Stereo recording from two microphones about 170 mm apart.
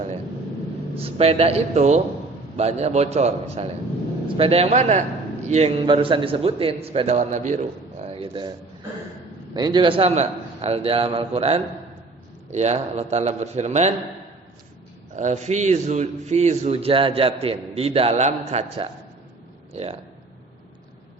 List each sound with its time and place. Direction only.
0.9 s a man's voice: 35° right (ahead or behind)
9.6 s a man's voice: 25° right (ahead or behind); by 13.9 s 40° right (ahead or behind)
15.1 s a man's voice: 45° right (ahead or behind)